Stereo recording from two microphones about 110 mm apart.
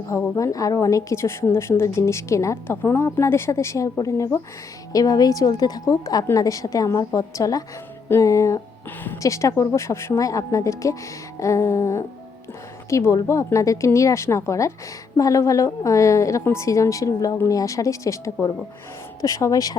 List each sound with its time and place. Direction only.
0.1 s a woman's voice: 25° left (ahead or behind)